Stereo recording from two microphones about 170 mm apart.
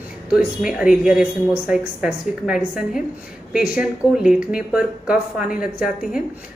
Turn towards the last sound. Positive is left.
turn(degrees=-5)  # may be behind; listen again after turning